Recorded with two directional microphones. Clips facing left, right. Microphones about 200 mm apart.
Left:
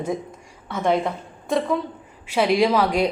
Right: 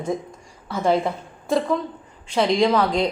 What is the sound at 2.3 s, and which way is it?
Speech, 10° left (ahead or behind).